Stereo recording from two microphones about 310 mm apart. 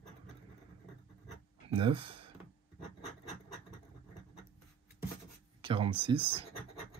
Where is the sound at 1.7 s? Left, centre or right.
Centre.